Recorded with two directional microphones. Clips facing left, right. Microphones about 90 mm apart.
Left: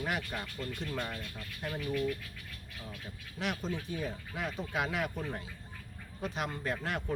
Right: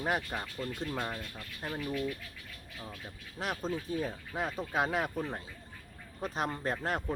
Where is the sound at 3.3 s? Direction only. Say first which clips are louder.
Right 1 dB; 40° right (ahead or behind).